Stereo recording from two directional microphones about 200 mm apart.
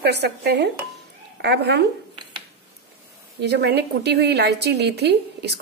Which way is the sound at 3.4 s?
55° right (ahead or behind).